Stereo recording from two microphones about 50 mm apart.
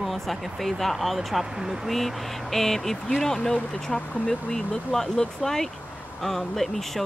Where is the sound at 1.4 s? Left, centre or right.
Centre.